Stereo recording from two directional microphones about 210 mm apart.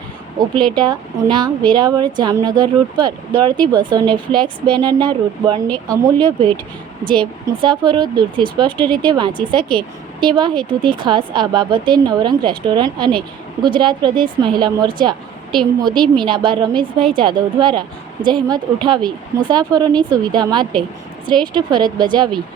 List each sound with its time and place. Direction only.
0.3 s speech: 20° right (ahead or behind)